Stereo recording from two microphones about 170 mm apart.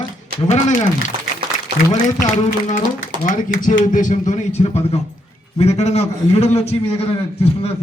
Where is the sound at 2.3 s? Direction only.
50° left (ahead or behind).